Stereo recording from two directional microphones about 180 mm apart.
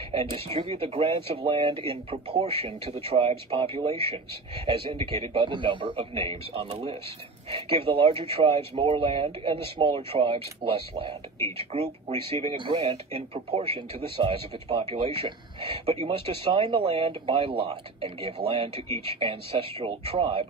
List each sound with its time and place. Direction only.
0.1 s speech: 30° right (ahead or behind)